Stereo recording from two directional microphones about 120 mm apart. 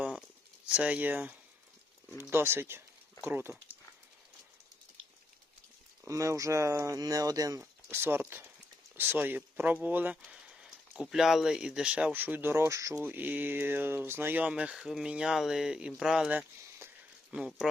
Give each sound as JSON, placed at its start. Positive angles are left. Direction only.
{"t": 0.7, "sound": "speech", "side_deg": -10}
{"t": 6.1, "sound": "speech", "side_deg": -25}
{"t": 7.6, "sound": "speech", "side_deg": -20}
{"t": 17.3, "sound": "speech", "side_deg": -5}